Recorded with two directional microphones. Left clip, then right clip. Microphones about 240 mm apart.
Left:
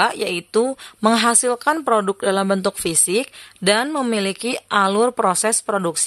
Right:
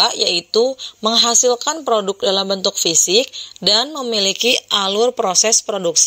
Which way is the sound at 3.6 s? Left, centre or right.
Centre.